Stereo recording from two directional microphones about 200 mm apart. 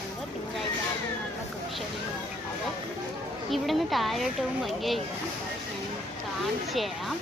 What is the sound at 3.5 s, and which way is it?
A woman's voice, centre (ahead or behind).